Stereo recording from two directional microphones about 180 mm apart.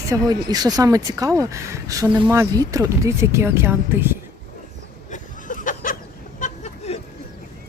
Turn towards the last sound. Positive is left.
turn(degrees=35)  # may be behind; listen again after turning